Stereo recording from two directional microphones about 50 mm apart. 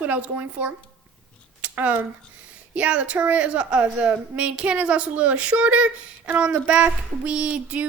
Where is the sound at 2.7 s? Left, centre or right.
Right.